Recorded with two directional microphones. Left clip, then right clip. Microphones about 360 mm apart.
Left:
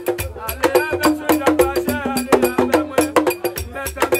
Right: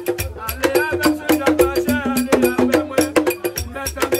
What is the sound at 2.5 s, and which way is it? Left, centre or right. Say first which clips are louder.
Music: even; centre.